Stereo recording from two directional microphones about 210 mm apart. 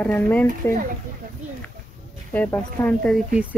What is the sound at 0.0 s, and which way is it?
Speech, 5° left (ahead or behind).